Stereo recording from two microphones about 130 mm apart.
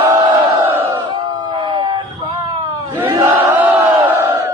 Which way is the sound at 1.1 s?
30° right (ahead or behind).